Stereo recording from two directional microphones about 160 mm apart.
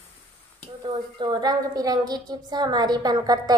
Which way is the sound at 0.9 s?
25° right (ahead or behind).